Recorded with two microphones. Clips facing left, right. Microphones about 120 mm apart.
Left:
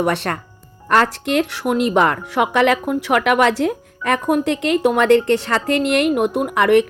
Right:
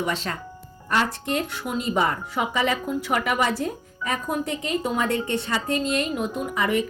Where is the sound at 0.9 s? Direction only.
90° left.